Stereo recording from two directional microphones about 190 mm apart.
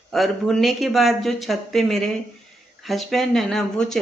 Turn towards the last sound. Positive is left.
turn(degrees=0)  # may be behind; listen again after turning